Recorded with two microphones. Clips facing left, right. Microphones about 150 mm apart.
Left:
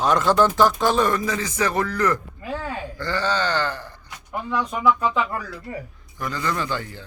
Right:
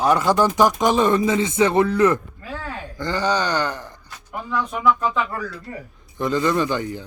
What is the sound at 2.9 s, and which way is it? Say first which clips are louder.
Speech: right 3 dB; 15° right (ahead or behind).